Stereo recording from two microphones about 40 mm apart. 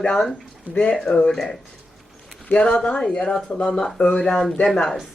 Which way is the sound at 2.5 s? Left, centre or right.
Left.